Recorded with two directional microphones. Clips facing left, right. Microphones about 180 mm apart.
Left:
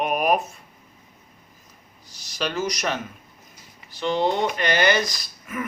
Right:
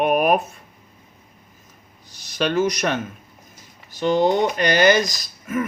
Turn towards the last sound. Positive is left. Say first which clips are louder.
# right 7 dB
turn(degrees=-40)  # may be behind; listen again after turning